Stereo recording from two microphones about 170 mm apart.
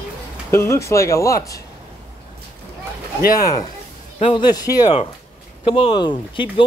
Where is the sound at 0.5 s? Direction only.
15° left (ahead or behind).